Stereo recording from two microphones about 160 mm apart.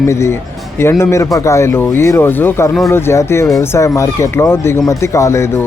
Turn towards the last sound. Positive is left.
turn(degrees=15)  # may be behind; listen again after turning